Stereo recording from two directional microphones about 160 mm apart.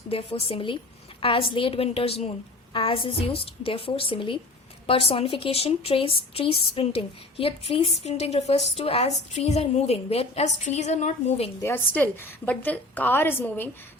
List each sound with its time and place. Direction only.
0.1 s a woman's voice: 35° left (ahead or behind)
11.6 s a woman's voice: 15° left (ahead or behind)